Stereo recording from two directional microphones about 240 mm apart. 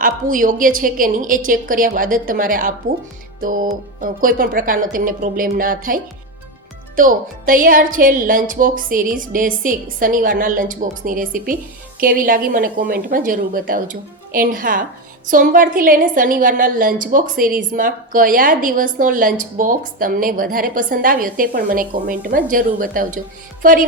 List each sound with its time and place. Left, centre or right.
0.0 s a woman's voice: right